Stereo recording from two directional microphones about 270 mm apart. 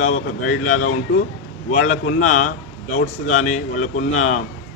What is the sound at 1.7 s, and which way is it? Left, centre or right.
Speech, left.